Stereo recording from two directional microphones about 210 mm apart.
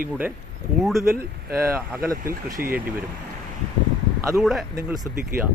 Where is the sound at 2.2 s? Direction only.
40° right (ahead or behind).